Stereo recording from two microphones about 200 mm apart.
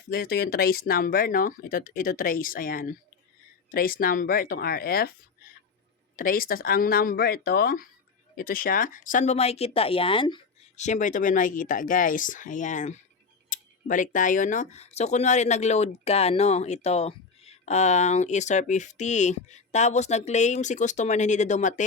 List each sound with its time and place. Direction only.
0.1 s speech: 50° left (ahead or behind)
6.1 s speech: 45° left (ahead or behind); by 10.4 s 25° left (ahead or behind)
10.8 s speech: 35° left (ahead or behind)